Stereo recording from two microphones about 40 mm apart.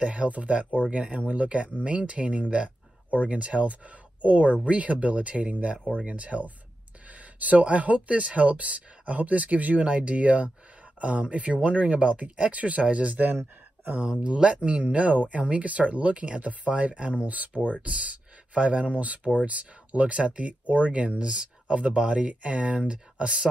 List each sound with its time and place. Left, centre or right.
0.0 s speech: right
14.2 s speech: right